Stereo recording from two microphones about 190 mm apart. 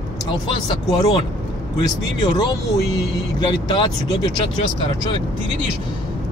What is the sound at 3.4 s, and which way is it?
Speech, 25° left (ahead or behind).